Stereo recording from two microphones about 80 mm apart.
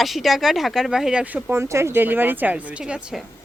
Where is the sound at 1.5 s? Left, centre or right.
Right.